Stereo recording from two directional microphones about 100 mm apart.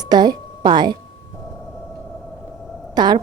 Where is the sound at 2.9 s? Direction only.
45° right (ahead or behind).